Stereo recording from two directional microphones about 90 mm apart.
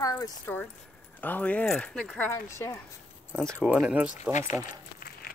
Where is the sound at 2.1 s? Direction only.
25° left (ahead or behind).